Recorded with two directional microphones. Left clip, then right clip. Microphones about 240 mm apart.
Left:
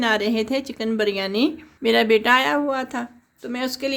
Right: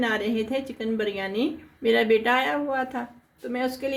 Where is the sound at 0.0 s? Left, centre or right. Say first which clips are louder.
Left 5 dB; left.